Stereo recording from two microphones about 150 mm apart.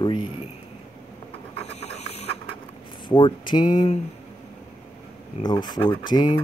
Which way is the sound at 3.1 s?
35° left (ahead or behind).